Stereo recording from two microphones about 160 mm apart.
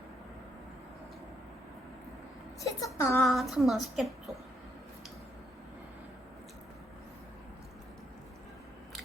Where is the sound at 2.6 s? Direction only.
20° left (ahead or behind).